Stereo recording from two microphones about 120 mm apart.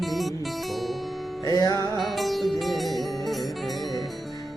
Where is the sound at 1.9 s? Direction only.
Centre (ahead or behind).